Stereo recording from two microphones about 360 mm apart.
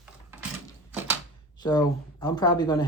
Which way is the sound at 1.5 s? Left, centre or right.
Centre.